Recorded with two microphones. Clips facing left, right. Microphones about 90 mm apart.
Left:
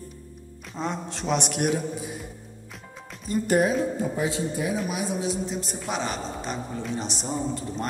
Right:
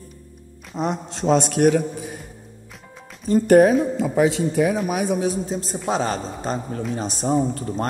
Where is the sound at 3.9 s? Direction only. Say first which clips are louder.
Right 7 dB; 80° right; by 4.8 s 65° right (ahead or behind).